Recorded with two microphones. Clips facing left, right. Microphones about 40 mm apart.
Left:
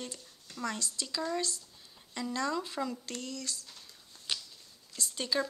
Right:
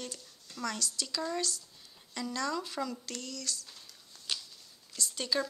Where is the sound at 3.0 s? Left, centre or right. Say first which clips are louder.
Left 1 dB; left.